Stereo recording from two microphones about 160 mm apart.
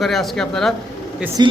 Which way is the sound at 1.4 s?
25° right (ahead or behind).